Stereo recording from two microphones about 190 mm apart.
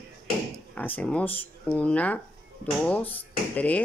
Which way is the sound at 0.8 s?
10° left (ahead or behind).